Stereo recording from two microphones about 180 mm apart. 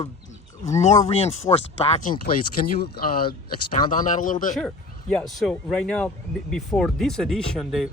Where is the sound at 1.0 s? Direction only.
35° left (ahead or behind).